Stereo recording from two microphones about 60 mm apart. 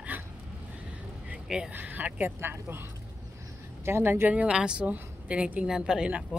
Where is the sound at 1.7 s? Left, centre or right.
Right.